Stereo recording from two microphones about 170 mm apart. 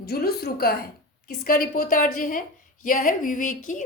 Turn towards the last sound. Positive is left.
turn(degrees=50)  # may be behind; listen again after turning